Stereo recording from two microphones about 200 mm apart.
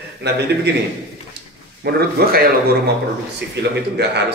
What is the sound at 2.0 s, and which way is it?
Speech, 50° right (ahead or behind).